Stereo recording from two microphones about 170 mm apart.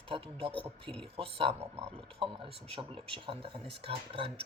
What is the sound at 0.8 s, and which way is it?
Speech, 5° left (ahead or behind).